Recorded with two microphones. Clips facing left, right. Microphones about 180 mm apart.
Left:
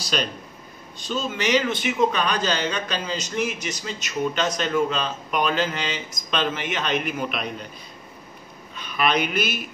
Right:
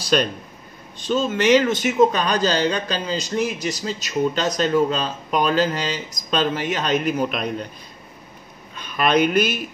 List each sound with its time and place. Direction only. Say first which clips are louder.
1.0 s a man's voice: right 7 dB; 50° right (ahead or behind)
8.7 s speech: right 4 dB; 45° right (ahead or behind)